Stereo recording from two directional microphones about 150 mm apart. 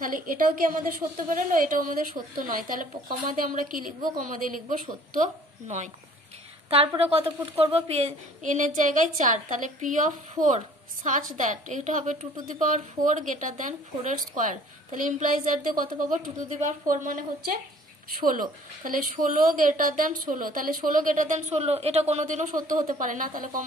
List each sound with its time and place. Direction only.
0.0 s a woman's voice: 65° right (ahead or behind)
7.0 s a woman's voice: 40° right (ahead or behind); by 23.6 s 65° right (ahead or behind)